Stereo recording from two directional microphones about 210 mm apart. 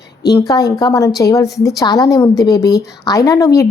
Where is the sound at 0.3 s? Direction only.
15° left (ahead or behind).